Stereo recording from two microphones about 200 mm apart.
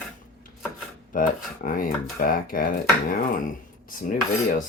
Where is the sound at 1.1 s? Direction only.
45° left (ahead or behind).